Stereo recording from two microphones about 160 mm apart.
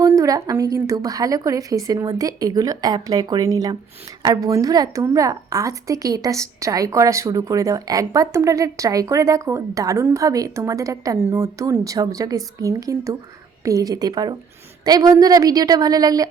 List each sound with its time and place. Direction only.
0.0 s a woman's voice: 20° right (ahead or behind)